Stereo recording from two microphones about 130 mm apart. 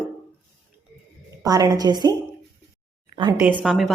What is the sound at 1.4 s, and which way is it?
Speech, 30° right (ahead or behind).